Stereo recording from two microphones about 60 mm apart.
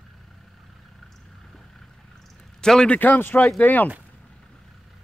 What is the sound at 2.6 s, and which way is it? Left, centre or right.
Speech, centre.